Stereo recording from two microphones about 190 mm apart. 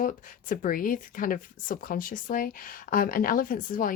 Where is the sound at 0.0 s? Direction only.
45° left (ahead or behind).